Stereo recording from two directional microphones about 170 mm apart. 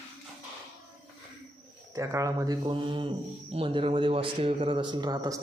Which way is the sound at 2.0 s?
20° right (ahead or behind).